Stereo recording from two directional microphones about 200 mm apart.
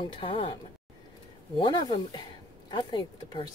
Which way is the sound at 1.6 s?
25° left (ahead or behind).